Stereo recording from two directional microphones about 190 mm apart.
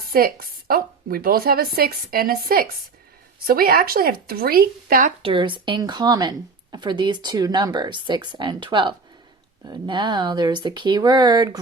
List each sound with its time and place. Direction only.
0.1 s a woman's voice: 50° right (ahead or behind)
5.2 s speech: 25° right (ahead or behind)